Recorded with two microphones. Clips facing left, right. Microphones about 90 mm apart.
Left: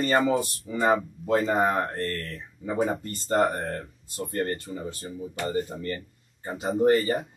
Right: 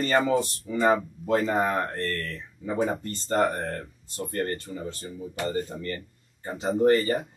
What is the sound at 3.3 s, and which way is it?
Speech, 35° left (ahead or behind).